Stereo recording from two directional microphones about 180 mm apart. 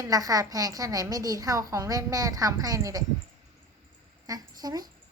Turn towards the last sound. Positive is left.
turn(degrees=-20)  # may be behind; listen again after turning